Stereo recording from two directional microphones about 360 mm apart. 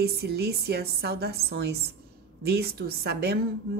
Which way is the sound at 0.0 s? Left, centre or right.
Right.